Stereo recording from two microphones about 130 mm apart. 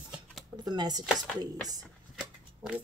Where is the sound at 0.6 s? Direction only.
30° right (ahead or behind).